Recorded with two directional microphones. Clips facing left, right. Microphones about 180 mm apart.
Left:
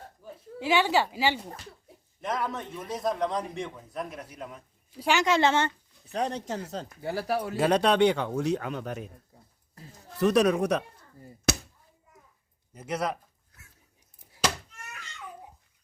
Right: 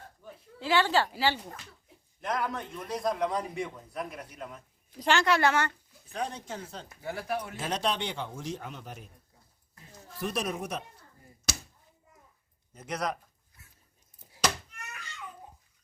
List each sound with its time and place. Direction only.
0.2 s a sound: 5° left (ahead or behind)
0.6 s speech: 15° left (ahead or behind)
2.2 s a man's voice: centre (ahead or behind)
4.9 s a woman's voice: 15° left (ahead or behind)
6.1 s speech: 40° left (ahead or behind)
7.5 s speech: 60° left (ahead or behind); by 9.0 s 80° left
10.2 s speech: 75° left (ahead or behind)
11.5 s a sound: 60° left (ahead or behind)
12.7 s speech: 5° left (ahead or behind)